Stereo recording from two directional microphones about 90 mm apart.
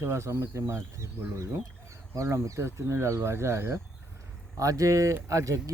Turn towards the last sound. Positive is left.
turn(degrees=-35)  # may be behind; listen again after turning